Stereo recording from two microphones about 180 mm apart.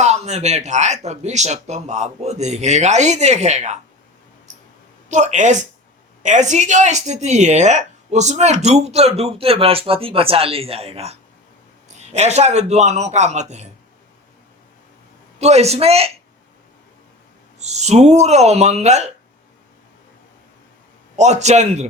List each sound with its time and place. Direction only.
0.0 s speech: 40° right (ahead or behind)
5.0 s speech: 40° right (ahead or behind)
15.4 s speech: 40° right (ahead or behind)
17.6 s speech: 40° right (ahead or behind)
21.2 s speech: 40° right (ahead or behind)